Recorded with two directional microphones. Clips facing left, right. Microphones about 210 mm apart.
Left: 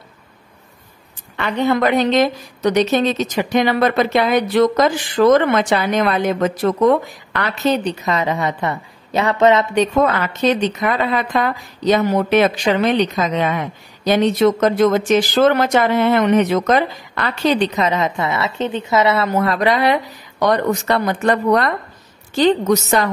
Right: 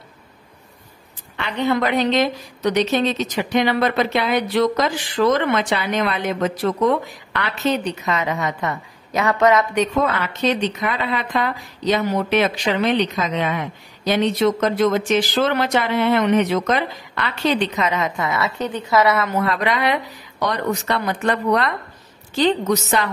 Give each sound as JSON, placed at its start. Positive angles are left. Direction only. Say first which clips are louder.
{"t": 1.3, "sound": "a woman's voice", "louder": "left 3 dB", "side_deg": 45}
{"t": 10.0, "sound": "a woman's voice", "louder": "left 4 dB", "side_deg": 45}
{"t": 20.3, "sound": "a woman's voice", "louder": "left 6 dB", "side_deg": 45}